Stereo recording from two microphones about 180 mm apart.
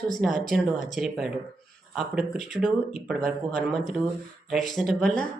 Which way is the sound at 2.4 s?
45° left (ahead or behind).